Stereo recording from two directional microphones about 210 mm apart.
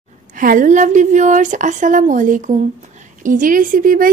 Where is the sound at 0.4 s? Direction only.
40° right (ahead or behind).